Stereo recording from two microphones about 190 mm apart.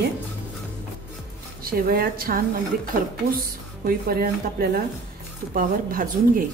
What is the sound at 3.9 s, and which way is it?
Speech, 50° right (ahead or behind).